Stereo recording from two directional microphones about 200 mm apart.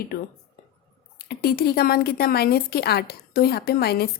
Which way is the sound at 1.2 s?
50° left (ahead or behind).